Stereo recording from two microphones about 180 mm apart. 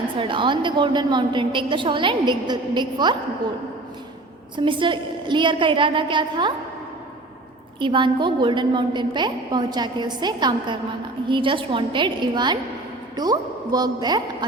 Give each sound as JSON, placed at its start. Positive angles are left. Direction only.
{"t": 0.2, "sound": "a woman's voice", "side_deg": -30}
{"t": 4.5, "sound": "a woman's voice", "side_deg": -25}
{"t": 7.8, "sound": "a woman's voice", "side_deg": -25}